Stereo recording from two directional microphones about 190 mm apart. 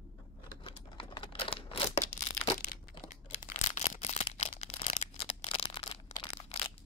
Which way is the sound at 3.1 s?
40° left (ahead or behind).